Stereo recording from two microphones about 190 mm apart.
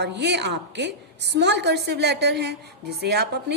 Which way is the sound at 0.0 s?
65° right (ahead or behind).